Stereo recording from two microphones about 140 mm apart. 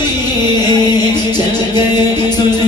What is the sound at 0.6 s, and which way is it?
Music, 30° left (ahead or behind).